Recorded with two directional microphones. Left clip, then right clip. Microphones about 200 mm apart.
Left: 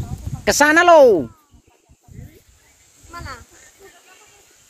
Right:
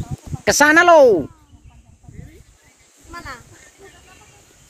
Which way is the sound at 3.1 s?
60° right (ahead or behind).